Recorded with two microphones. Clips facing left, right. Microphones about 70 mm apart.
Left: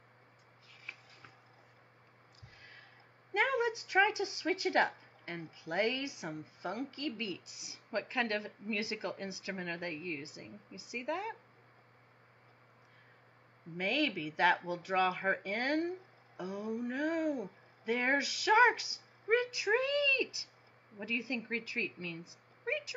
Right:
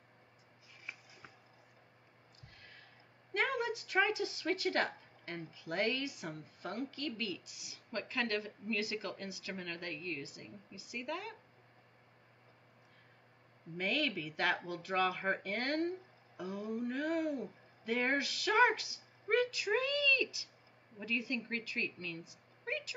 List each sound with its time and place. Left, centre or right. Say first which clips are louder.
3.3 s speech: left 3 dB; centre
13.7 s speech: left 2 dB; centre